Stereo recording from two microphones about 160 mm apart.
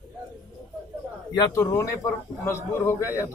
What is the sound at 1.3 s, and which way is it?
A man's voice, 20° left (ahead or behind).